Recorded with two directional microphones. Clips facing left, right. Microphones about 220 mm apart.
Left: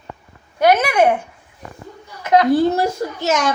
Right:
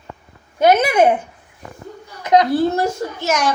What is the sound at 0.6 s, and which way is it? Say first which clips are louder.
Speech: right 1 dB; 20° right (ahead or behind).